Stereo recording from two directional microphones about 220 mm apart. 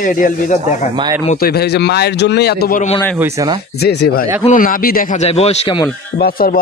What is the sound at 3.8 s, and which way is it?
A man's voice, 45° left (ahead or behind).